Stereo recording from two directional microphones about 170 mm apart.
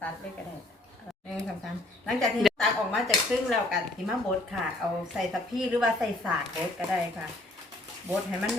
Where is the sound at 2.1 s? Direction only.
Centre (ahead or behind).